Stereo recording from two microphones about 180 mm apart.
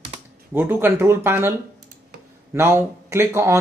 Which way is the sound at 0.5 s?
10° right (ahead or behind).